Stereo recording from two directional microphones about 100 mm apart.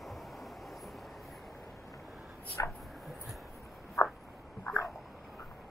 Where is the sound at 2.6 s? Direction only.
30° left (ahead or behind).